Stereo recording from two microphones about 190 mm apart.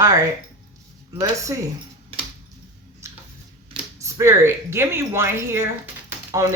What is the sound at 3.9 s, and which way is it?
Speech, 15° right (ahead or behind).